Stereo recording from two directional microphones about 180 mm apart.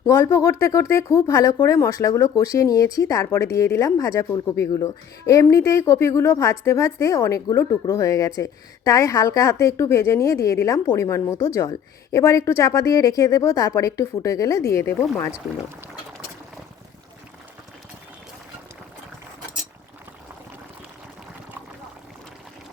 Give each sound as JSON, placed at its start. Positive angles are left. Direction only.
{"t": 0.0, "sound": "speech", "side_deg": 15}